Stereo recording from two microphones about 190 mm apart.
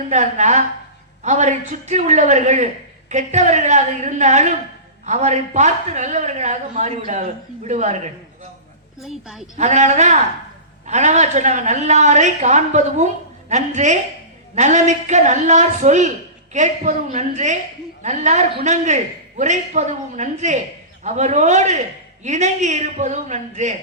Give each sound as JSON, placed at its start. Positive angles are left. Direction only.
{"t": 0.1, "sound": "a woman's voice", "side_deg": -40}
{"t": 9.0, "sound": "a woman's voice", "side_deg": -5}
{"t": 9.6, "sound": "a woman's voice", "side_deg": -40}